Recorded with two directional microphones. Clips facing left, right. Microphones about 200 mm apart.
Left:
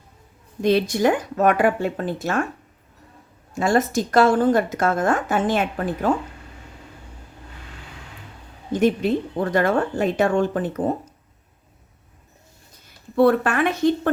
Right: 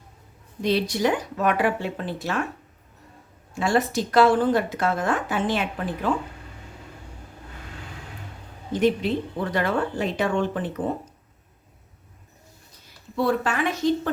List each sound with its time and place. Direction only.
0.6 s a woman's voice: 50° left (ahead or behind)
3.5 s a woman's voice: 45° left (ahead or behind)
8.7 s a woman's voice: 45° left (ahead or behind)
13.1 s speech: 60° left (ahead or behind)